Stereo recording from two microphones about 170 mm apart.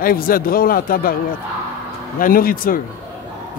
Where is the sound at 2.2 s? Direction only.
55° left (ahead or behind).